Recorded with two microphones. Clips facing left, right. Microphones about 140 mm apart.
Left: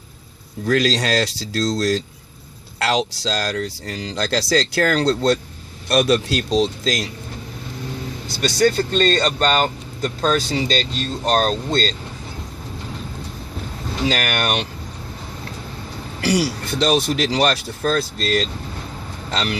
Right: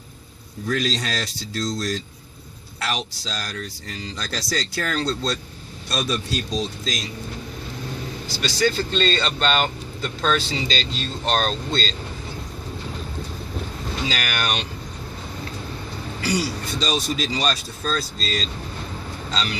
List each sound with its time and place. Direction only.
0.7 s speech: 80° left
8.4 s speech: 45° left (ahead or behind)
10.5 s speech: 50° left (ahead or behind)
14.1 s speech: 50° left (ahead or behind)
16.2 s speech: 70° left (ahead or behind)